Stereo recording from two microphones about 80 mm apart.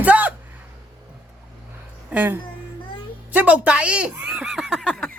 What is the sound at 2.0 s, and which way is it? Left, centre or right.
A woman's voice, right.